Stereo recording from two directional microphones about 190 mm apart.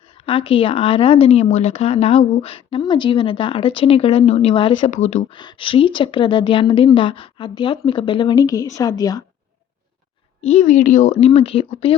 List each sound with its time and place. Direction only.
0.3 s speech: 30° left (ahead or behind)
4.9 s speech: 35° left (ahead or behind)
5.4 s speech: 25° left (ahead or behind)
10.5 s speech: 40° left (ahead or behind)